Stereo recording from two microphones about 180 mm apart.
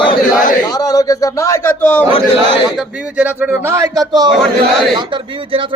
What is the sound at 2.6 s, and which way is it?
Speech, 5° right (ahead or behind).